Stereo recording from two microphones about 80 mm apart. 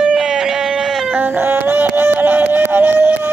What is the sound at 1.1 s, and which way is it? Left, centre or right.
Music, right.